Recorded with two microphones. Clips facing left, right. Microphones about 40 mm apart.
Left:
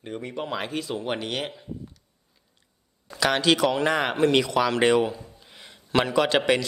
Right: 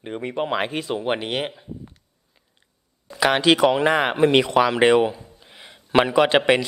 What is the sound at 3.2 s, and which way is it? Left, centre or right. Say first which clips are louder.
Speech: right 4 dB; right.